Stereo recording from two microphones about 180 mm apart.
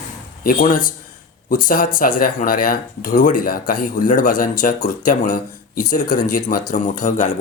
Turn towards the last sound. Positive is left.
turn(degrees=45)  # may be behind; listen again after turning